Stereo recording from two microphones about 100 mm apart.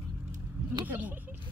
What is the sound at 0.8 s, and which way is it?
Speech, 20° right (ahead or behind).